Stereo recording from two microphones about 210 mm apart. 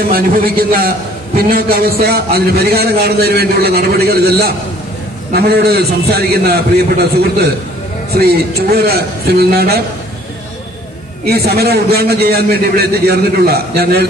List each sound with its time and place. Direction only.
0.1 s a man's voice: 45° right (ahead or behind)
11.2 s a man's voice: 50° right (ahead or behind)